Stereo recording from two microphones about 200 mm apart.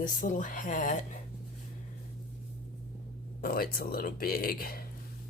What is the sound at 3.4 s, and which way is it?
Speech, 45° left (ahead or behind).